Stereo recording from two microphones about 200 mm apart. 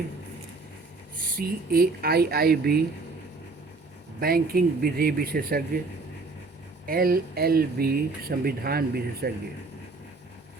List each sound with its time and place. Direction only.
1.2 s speech: 50° right (ahead or behind)
4.2 s speech: 50° right (ahead or behind)
6.8 s speech: 45° right (ahead or behind)